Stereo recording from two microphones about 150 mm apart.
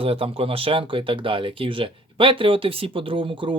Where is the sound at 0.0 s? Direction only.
40° right (ahead or behind).